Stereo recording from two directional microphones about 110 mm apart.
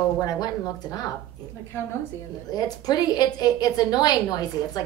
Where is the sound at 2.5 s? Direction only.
35° left (ahead or behind).